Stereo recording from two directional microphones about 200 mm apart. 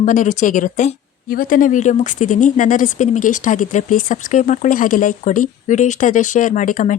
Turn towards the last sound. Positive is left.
turn(degrees=40)  # may be behind; listen again after turning